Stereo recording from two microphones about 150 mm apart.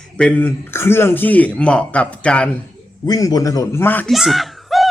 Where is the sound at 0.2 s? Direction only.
10° left (ahead or behind).